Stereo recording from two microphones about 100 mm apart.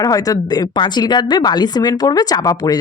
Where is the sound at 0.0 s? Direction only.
35° left (ahead or behind).